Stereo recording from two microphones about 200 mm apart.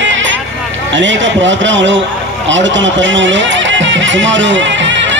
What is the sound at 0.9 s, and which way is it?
A man's voice, 65° right (ahead or behind).